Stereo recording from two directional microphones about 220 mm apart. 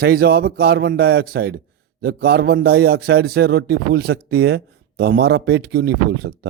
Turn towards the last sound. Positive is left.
turn(degrees=-45)  # may be behind; listen again after turning